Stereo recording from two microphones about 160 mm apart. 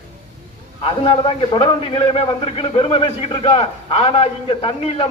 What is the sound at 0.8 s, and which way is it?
A man's voice, 35° left (ahead or behind).